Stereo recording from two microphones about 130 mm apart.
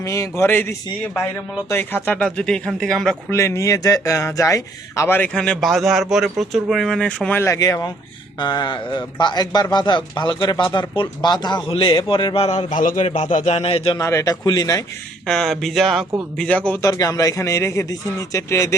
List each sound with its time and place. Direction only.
0.0 s a man's voice: 20° left (ahead or behind); by 3.2 s 5° left (ahead or behind)
3.2 s speech: 20° left (ahead or behind); by 7.3 s 5° left (ahead or behind)
7.3 s a man's voice: 25° left (ahead or behind); by 12.5 s 50° left (ahead or behind)
12.7 s a man's voice: 90° left
13.1 s a man's voice: 60° left (ahead or behind)
13.5 s a man's voice: 50° left (ahead or behind)
14.0 s a man's voice: 25° left (ahead or behind)
15.3 s speech: 5° left (ahead or behind)
16.8 s a man's voice: 25° left (ahead or behind)